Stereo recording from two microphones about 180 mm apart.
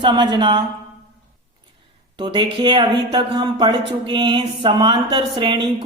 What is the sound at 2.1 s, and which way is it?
Speech, 25° right (ahead or behind).